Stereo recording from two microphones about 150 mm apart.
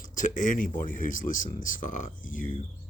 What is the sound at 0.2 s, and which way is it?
Speech, 60° left (ahead or behind).